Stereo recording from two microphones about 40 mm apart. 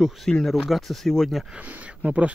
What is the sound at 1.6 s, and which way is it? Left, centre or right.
Speech, right.